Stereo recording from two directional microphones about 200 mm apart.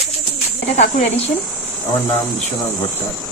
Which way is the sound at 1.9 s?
15° left (ahead or behind).